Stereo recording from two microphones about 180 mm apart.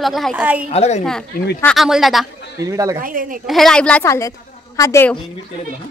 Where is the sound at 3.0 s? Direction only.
50° right (ahead or behind).